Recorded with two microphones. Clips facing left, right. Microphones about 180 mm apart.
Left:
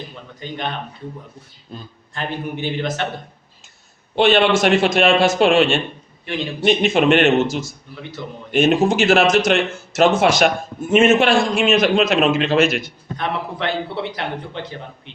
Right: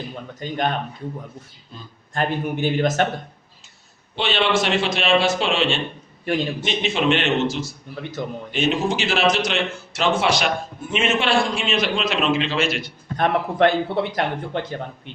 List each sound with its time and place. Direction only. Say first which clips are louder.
0.3 s a man's voice: right 3 dB; 45° right (ahead or behind)
2.1 s a man's voice: right 3 dB; 45° right (ahead or behind)
4.1 s a man's voice: left 6 dB; 50° left (ahead or behind)
8.2 s a man's voice: right 4 dB; 50° right (ahead or behind)
8.5 s a man's voice: left 7 dB; 50° left (ahead or behind)
13.1 s a man's voice: right 6 dB; 50° right (ahead or behind)